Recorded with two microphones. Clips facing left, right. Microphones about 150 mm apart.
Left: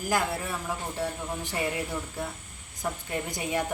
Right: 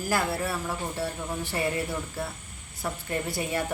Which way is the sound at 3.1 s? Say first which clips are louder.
Right 4 dB; 15° left (ahead or behind).